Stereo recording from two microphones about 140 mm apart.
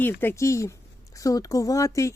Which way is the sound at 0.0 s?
15° left (ahead or behind).